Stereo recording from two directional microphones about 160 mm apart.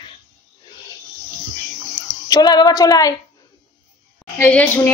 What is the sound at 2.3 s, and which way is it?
Speech, 25° left (ahead or behind).